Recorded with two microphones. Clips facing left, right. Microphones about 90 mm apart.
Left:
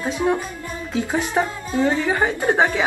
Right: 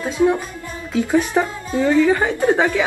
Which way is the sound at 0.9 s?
20° left (ahead or behind).